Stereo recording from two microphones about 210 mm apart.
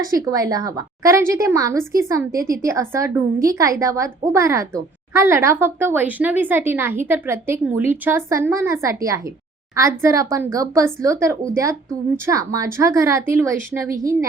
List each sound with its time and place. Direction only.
0.0 s a woman's voice: 15° right (ahead or behind)